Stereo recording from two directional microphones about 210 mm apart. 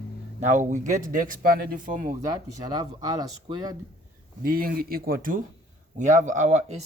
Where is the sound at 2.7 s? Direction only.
20° right (ahead or behind).